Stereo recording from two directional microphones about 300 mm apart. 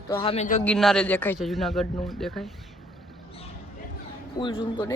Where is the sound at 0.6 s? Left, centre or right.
Centre.